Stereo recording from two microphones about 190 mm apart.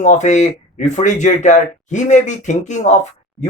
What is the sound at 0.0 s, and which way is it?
Speech, 40° left (ahead or behind).